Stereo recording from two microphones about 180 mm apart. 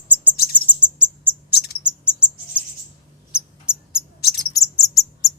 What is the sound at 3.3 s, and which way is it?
Cricket, 5° right (ahead or behind).